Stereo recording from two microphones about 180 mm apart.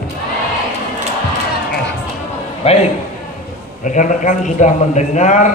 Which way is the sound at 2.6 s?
35° left (ahead or behind).